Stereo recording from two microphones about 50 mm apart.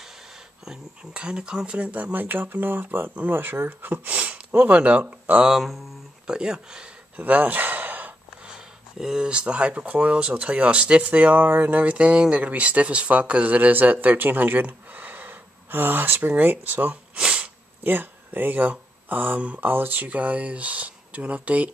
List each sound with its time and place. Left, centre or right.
1.1 s speech: centre
2.1 s speech: right
5.5 s speech: centre
6.2 s speech: centre
7.2 s a sound: right
8.5 s speech: centre; by 17.0 s right
17.1 s sneeze: right
17.8 s speech: right